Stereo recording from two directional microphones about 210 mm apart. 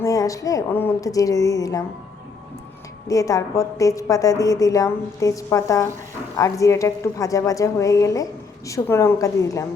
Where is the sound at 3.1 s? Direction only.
15° left (ahead or behind).